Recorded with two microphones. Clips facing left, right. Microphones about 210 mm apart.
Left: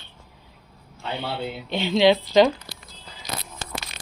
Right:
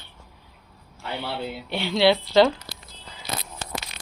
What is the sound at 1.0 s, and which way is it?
Speech, 20° left (ahead or behind).